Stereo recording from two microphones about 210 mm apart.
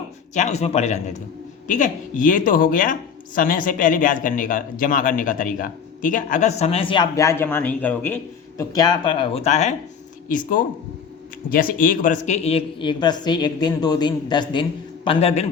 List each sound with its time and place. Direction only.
0.3 s speech: 30° left (ahead or behind)